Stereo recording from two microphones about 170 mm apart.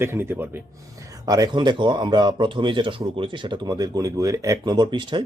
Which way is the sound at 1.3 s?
25° right (ahead or behind).